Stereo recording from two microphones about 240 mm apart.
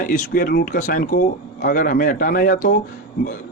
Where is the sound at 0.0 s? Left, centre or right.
Left.